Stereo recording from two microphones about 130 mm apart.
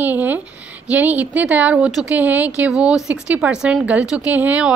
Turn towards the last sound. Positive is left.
turn(degrees=-10)  # may be behind; listen again after turning